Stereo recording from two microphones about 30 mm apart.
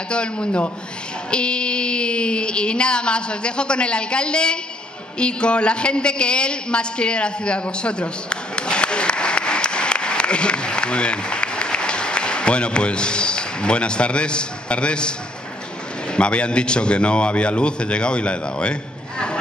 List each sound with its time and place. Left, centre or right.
0.1 s a man's voice: left